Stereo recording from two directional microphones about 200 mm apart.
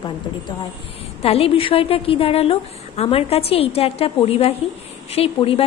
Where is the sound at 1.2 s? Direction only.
30° left (ahead or behind).